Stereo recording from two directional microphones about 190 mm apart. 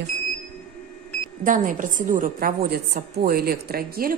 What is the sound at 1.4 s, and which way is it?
A woman's voice, 45° right (ahead or behind).